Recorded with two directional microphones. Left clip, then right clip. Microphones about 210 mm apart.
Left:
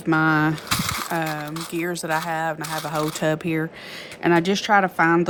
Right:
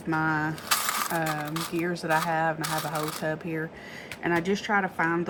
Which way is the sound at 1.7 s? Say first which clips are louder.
Left 2 dB; 60° left (ahead or behind).